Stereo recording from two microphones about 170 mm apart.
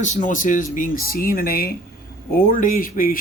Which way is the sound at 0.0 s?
50° left (ahead or behind).